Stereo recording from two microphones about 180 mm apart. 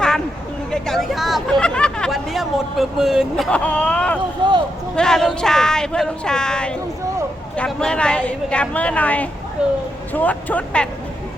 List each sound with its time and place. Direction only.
0.7 s speech: centre (ahead or behind)
4.4 s a sound: 25° right (ahead or behind)
4.9 s speech: 5° left (ahead or behind)
9.6 s speech: 5° right (ahead or behind)
10.1 s speech: 10° left (ahead or behind)